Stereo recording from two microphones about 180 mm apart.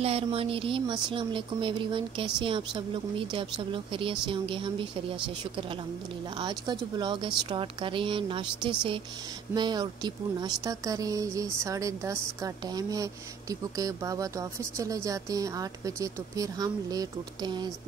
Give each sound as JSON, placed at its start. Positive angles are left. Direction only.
{"t": 0.0, "sound": "speech", "side_deg": -30}
{"t": 6.3, "sound": "speech", "side_deg": -25}